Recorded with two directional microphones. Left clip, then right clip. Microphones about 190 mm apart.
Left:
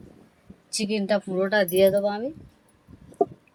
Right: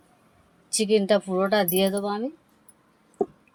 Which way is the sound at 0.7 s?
20° right (ahead or behind).